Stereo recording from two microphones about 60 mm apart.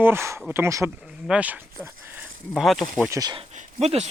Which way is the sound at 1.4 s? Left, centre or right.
Right.